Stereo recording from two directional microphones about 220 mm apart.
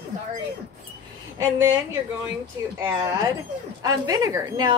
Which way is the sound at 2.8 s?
15° right (ahead or behind).